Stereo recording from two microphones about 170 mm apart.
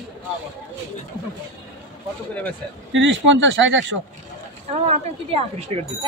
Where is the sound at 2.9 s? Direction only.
90° right.